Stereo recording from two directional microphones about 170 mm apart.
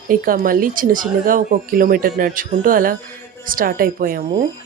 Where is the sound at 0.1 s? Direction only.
55° right (ahead or behind).